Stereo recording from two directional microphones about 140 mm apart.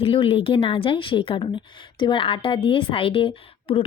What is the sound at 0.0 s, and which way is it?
A woman's voice, 40° left (ahead or behind).